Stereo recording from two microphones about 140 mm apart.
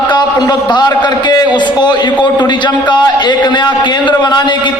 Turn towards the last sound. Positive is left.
turn(degrees=35)  # may be behind; listen again after turning